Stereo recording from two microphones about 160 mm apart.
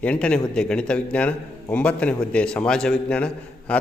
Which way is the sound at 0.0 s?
5° left (ahead or behind).